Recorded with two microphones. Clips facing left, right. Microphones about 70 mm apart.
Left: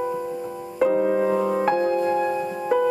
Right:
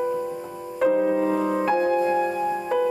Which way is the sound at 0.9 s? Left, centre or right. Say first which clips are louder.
Right 1 dB; left.